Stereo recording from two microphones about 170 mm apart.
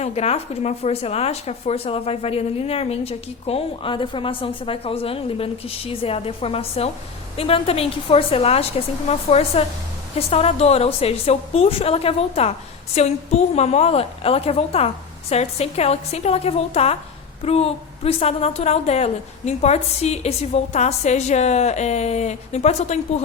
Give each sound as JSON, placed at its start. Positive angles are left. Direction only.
{"t": 0.0, "sound": "speech", "side_deg": 40}